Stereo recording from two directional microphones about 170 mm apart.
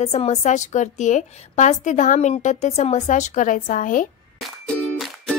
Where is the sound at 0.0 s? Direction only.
40° left (ahead or behind).